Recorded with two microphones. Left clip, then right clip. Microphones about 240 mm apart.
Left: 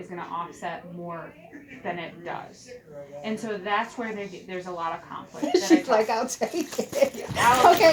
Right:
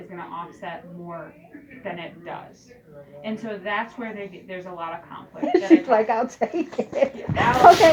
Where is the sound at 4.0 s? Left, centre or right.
Left.